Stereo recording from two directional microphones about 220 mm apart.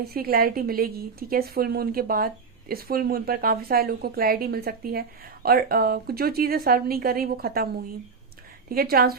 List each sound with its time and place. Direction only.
0.0 s a woman's voice: 45° right (ahead or behind)
8.7 s a woman's voice: 45° right (ahead or behind)